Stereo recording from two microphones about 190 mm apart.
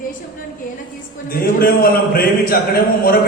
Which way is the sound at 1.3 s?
50° left (ahead or behind).